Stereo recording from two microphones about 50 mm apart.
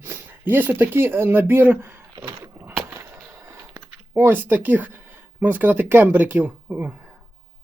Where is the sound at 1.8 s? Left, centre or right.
Right.